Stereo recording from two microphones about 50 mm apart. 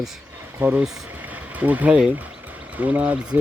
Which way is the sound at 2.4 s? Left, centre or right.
Right.